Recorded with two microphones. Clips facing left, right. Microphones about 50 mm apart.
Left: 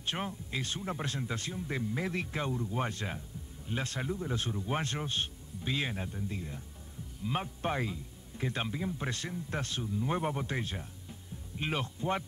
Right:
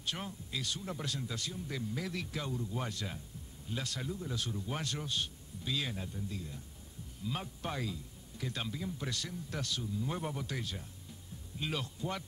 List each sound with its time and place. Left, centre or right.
0.0 s a man's voice: left